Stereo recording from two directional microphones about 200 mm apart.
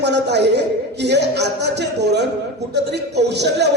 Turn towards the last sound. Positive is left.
turn(degrees=-60)  # may be behind; listen again after turning